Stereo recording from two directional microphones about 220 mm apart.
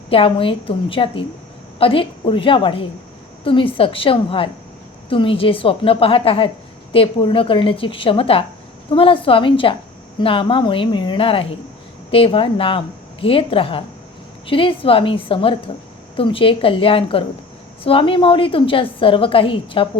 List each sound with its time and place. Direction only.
0.1 s a woman's voice: 25° left (ahead or behind)